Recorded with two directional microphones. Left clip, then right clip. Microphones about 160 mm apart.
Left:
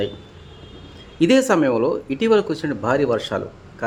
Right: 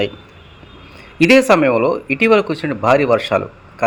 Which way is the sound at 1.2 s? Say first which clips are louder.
Right 5 dB; 20° right (ahead or behind).